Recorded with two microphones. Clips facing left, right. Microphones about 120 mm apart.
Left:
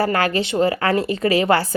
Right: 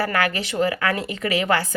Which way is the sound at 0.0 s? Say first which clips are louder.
Left 4 dB; 30° left (ahead or behind).